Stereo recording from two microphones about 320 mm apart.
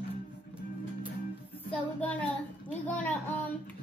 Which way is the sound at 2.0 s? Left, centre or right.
Centre.